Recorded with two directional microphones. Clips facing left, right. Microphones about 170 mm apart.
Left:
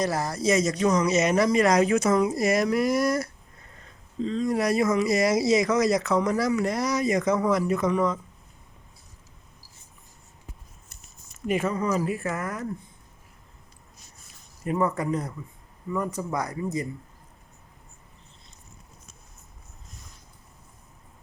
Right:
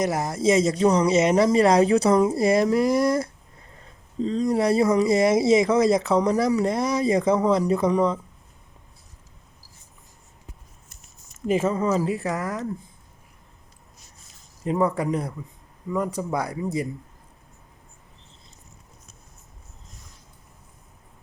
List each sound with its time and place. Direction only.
0.0 s speech: 20° right (ahead or behind)
4.2 s a man's voice: 40° right (ahead or behind)
4.4 s a man's voice: 25° right (ahead or behind)
11.4 s speech: 30° right (ahead or behind)
14.6 s speech: 20° right (ahead or behind)